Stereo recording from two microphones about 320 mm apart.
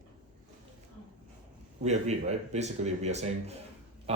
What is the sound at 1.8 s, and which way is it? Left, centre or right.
Speech, right.